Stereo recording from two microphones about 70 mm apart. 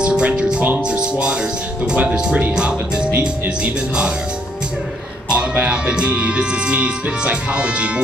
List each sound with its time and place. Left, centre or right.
0.0 s music: centre
0.8 s speech: centre
1.9 s music: centre
5.3 s music: centre